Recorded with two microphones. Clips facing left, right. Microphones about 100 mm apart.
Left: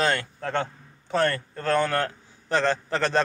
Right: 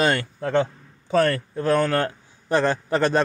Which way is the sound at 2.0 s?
15° right (ahead or behind).